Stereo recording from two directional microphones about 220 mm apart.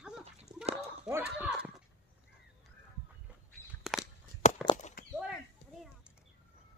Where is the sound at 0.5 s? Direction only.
20° right (ahead or behind).